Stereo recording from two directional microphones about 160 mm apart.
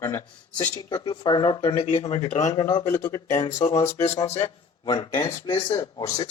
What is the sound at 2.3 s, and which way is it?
Speech, 45° left (ahead or behind).